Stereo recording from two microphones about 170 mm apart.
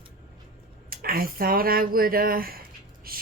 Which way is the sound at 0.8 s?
60° right (ahead or behind).